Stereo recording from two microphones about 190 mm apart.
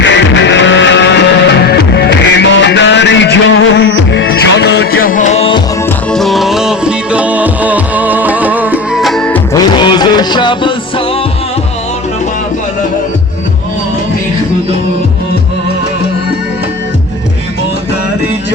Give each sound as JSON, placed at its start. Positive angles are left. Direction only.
{"t": 0.0, "sound": "music", "side_deg": 70}
{"t": 4.3, "sound": "music", "side_deg": 65}
{"t": 6.1, "sound": "music", "side_deg": 0}
{"t": 9.6, "sound": "music", "side_deg": 25}